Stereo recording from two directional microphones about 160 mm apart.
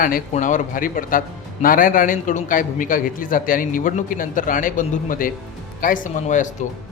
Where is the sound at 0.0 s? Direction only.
55° left (ahead or behind).